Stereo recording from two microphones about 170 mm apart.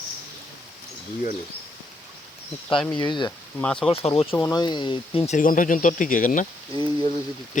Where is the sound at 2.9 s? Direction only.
25° left (ahead or behind).